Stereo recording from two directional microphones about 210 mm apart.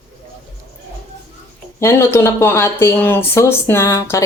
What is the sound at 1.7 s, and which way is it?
Speech, 10° left (ahead or behind).